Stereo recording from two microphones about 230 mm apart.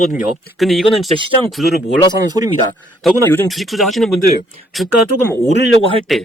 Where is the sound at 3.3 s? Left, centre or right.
Centre.